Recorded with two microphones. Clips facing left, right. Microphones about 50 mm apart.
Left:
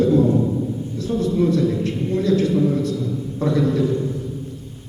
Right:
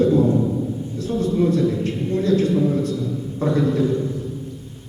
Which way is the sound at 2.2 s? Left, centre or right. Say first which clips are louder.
Even; right.